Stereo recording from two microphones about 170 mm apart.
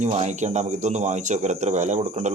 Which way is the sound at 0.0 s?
40° right (ahead or behind).